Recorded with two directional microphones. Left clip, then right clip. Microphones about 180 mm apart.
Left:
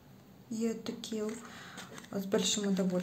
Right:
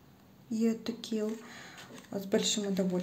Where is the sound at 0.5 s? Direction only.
10° right (ahead or behind).